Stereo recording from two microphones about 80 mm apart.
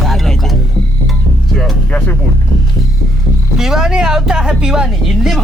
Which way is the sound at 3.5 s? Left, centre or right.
Centre.